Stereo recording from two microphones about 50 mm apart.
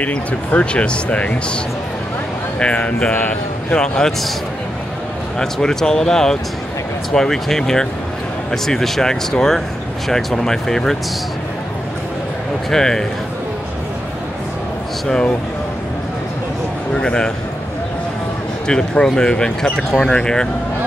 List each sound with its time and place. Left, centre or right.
0.0 s speech: left
2.6 s speech: left
3.7 s speech: centre
5.4 s speech: centre
12.6 s a man's voice: centre
16.9 s speech: centre
18.7 s speech: centre